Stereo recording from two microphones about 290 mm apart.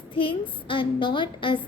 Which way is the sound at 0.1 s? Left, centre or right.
Centre.